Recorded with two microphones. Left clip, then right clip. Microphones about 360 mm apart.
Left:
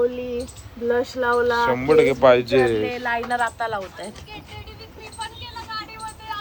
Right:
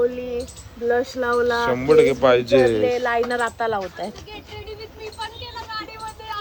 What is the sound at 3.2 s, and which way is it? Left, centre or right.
Speech, right.